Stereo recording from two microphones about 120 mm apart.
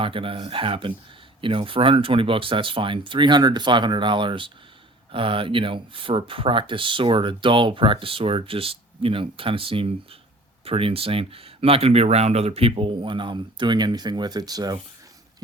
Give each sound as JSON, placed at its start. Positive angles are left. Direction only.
{"t": 0.0, "sound": "speech", "side_deg": -50}